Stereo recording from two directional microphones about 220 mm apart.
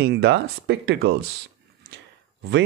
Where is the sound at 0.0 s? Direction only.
50° right (ahead or behind).